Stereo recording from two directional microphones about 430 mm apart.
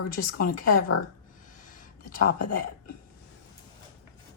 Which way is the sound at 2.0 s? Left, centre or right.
Centre.